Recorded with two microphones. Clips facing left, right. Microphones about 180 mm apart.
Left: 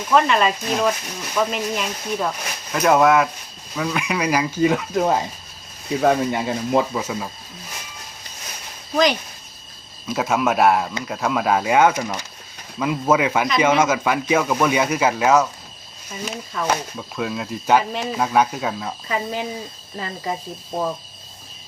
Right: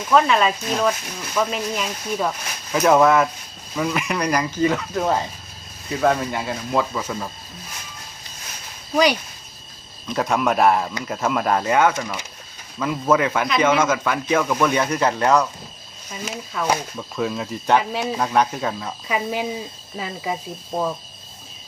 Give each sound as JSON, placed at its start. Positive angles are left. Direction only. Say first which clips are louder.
{"t": 0.1, "sound": "speech", "louder": "even", "side_deg": 0}
{"t": 10.1, "sound": "speech", "louder": "even", "side_deg": 5}
{"t": 19.0, "sound": "speech", "louder": "right 2 dB", "side_deg": -10}